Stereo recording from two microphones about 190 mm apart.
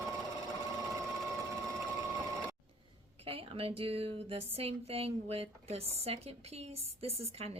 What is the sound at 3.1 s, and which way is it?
Speech, 30° right (ahead or behind).